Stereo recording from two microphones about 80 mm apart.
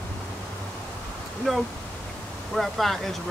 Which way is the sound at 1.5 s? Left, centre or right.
Centre.